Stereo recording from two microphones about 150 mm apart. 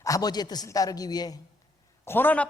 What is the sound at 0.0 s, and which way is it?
Speech, 25° left (ahead or behind).